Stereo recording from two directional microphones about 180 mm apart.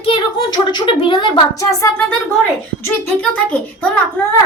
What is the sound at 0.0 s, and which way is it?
A woman's voice, 30° left (ahead or behind).